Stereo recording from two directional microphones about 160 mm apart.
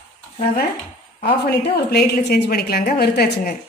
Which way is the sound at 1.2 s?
85° left.